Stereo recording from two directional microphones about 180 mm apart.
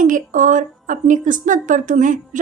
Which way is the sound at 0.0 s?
45° right (ahead or behind).